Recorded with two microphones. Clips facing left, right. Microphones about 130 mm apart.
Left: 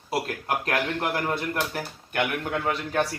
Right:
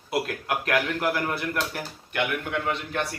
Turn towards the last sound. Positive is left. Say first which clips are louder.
# left 2 dB
turn(degrees=40)  # may be behind; listen again after turning